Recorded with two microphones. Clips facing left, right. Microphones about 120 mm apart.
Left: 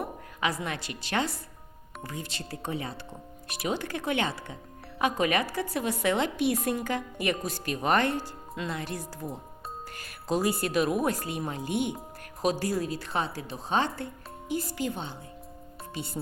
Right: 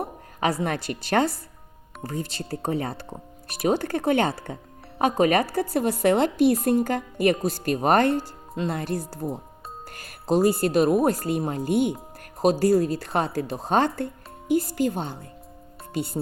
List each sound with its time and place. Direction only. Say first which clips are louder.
0.0 s a woman's voice: right 5 dB; 35° right (ahead or behind)
13.1 s speech: right 6 dB; 55° right (ahead or behind)